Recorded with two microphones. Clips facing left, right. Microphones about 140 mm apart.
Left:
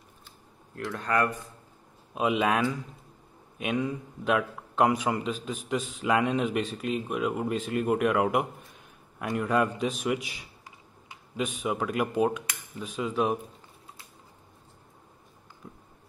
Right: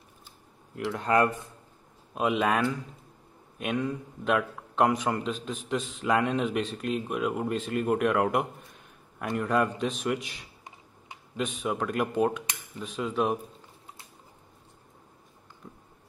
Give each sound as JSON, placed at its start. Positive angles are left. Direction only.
{"t": 0.7, "sound": "speech", "side_deg": -20}
{"t": 2.1, "sound": "speech", "side_deg": 0}
{"t": 15.6, "sound": "a sound", "side_deg": 0}